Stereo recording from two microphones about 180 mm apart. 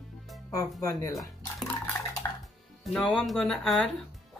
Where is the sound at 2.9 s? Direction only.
5° left (ahead or behind).